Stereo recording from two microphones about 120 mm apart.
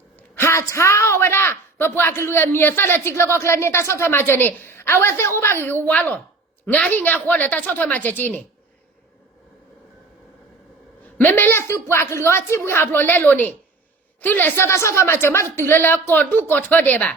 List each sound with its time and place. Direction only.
0.2 s a woman's voice: 20° left (ahead or behind)
11.2 s a woman's voice: 15° left (ahead or behind)